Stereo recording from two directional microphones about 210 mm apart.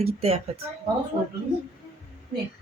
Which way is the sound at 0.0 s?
30° right (ahead or behind).